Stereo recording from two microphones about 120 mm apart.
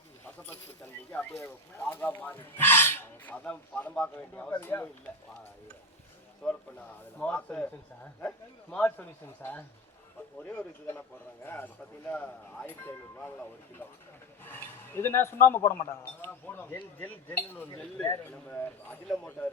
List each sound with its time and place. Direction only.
0.3 s a sound: 15° left (ahead or behind)
1.4 s speech: 15° left (ahead or behind)
6.4 s speech: 10° left (ahead or behind)
8.7 s speech: 15° left (ahead or behind)
14.4 s a sound: 15° left (ahead or behind)
15.6 s speech: 25° left (ahead or behind); by 19.5 s 10° left (ahead or behind)